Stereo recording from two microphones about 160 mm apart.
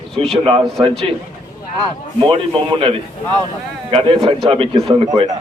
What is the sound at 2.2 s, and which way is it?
Speech, 35° right (ahead or behind).